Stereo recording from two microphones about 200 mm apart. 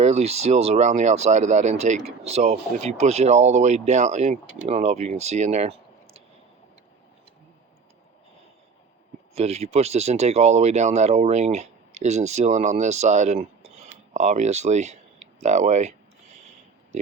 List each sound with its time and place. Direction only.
0.0 s speech: 30° right (ahead or behind)
9.3 s speech: 30° right (ahead or behind)